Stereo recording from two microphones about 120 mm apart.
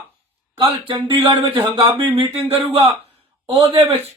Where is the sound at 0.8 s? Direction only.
40° right (ahead or behind).